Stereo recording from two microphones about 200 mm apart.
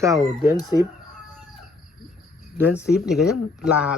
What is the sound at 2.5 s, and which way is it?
Speech, 10° right (ahead or behind).